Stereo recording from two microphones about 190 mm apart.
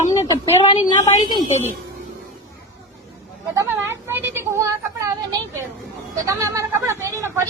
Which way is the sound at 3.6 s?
10° right (ahead or behind).